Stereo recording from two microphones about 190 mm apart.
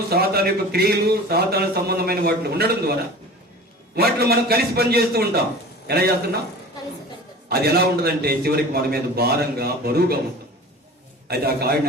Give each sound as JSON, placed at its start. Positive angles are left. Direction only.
{"t": 0.1, "sound": "speech", "side_deg": -55}
{"t": 3.9, "sound": "speech", "side_deg": -55}
{"t": 7.4, "sound": "speech", "side_deg": -55}
{"t": 11.3, "sound": "speech", "side_deg": -55}